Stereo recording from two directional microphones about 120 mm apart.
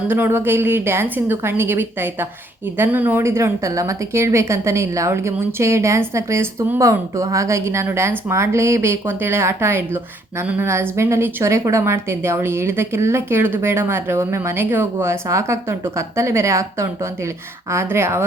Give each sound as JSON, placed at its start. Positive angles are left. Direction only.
{"t": 0.1, "sound": "a woman's voice", "side_deg": -15}